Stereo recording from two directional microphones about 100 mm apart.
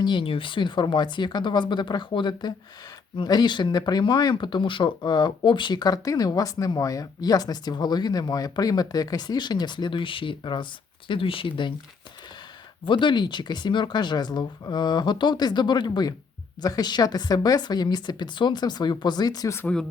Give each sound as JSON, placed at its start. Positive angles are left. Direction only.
{"t": 0.0, "sound": "speech", "side_deg": 55}
{"t": 12.8, "sound": "speech", "side_deg": 55}